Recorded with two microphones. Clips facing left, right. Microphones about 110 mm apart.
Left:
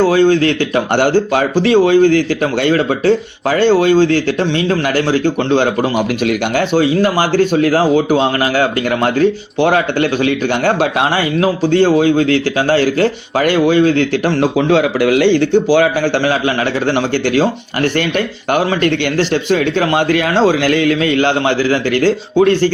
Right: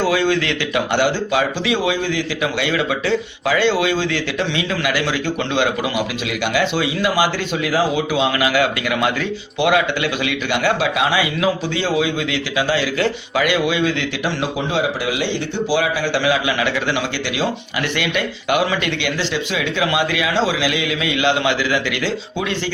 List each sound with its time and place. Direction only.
0.0 s speech: 35° left (ahead or behind)
0.9 s speech: 50° left (ahead or behind)
18.5 s speech: 45° left (ahead or behind)